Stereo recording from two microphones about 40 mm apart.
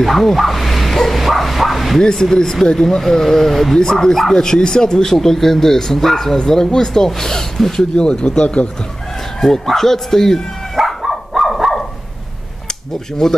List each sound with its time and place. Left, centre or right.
0.0 s bow-wow: centre
2.0 s speech: centre
7.9 s speech: left
9.4 s speech: centre
10.8 s dog: centre
13.2 s speech: centre